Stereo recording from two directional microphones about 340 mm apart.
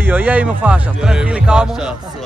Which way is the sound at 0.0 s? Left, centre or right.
Centre.